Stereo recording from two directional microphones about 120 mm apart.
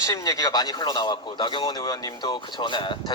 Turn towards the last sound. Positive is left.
turn(degrees=40)  # may be behind; listen again after turning